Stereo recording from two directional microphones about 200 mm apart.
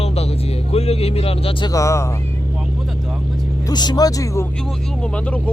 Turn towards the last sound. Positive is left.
turn(degrees=5)  # may be behind; listen again after turning